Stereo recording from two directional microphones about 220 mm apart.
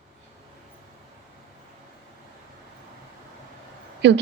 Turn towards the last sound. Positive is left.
turn(degrees=-50)  # may be behind; listen again after turning